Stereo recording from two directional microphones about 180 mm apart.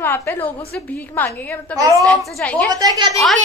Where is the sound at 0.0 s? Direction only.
15° left (ahead or behind).